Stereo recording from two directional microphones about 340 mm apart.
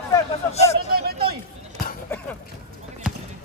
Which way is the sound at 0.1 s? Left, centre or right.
Centre.